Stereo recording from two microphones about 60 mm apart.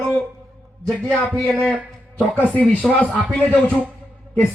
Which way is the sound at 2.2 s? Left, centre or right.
Left.